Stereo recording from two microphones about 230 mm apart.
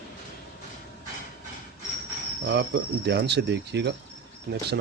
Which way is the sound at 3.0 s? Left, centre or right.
Right.